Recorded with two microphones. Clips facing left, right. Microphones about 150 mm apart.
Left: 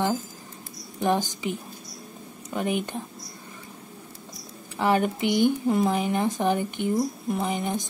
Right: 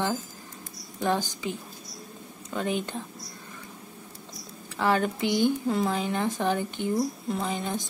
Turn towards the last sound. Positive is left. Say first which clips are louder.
# left 3 dB
turn(degrees=15)  # may be behind; listen again after turning